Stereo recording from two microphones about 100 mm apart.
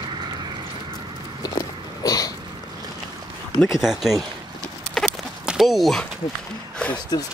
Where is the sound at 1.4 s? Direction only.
40° left (ahead or behind).